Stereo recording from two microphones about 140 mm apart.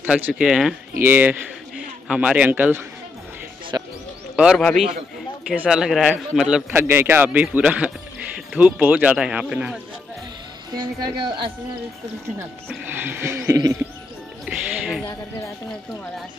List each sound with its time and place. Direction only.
0.0 s speech: 10° right (ahead or behind)
1.0 s music: 15° right (ahead or behind)
3.7 s music: 25° right (ahead or behind)
4.6 s speech: centre (ahead or behind)
6.7 s music: 15° right (ahead or behind)
7.4 s speech: 10° right (ahead or behind)
10.7 s speech: 30° right (ahead or behind)
12.6 s music: 15° right (ahead or behind)
14.4 s music: centre (ahead or behind)